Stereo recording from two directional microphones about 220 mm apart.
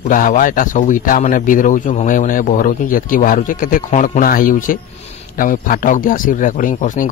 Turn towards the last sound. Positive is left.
turn(degrees=35)  # may be behind; listen again after turning